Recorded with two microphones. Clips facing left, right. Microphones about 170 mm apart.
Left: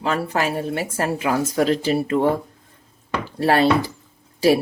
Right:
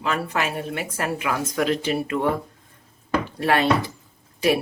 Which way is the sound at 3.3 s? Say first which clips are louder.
Left 5 dB; 35° left (ahead or behind).